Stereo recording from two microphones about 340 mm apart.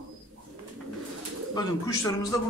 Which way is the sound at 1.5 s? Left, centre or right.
Centre.